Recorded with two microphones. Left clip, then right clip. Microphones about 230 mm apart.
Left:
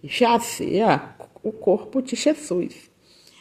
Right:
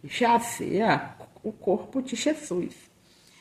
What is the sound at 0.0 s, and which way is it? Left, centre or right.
Speech, left.